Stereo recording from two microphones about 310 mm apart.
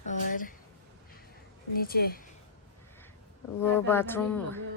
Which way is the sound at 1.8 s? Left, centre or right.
Left.